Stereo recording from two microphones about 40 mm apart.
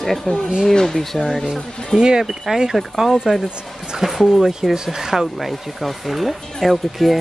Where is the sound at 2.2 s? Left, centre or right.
Centre.